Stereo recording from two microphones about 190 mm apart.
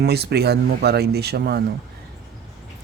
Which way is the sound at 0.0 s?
60° right (ahead or behind).